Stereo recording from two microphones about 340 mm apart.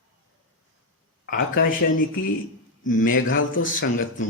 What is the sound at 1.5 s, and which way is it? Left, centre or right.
Speech, left.